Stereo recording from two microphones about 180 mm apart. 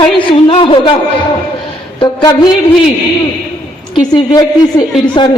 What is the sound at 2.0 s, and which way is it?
Speech, 20° left (ahead or behind).